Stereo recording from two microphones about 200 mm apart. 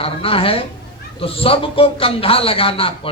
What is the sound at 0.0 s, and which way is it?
A man's voice, 30° left (ahead or behind).